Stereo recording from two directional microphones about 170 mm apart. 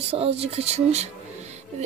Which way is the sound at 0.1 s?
35° right (ahead or behind).